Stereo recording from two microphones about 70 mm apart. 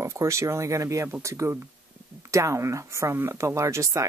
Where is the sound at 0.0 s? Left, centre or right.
Right.